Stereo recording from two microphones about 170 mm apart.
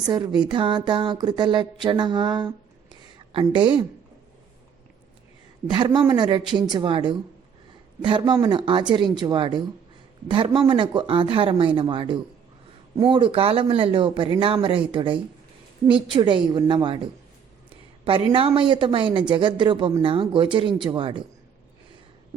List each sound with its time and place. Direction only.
0.1 s speech: 25° right (ahead or behind)
5.6 s speech: 25° right (ahead or behind)
8.2 s speech: 25° right (ahead or behind)
18.0 s speech: 30° right (ahead or behind)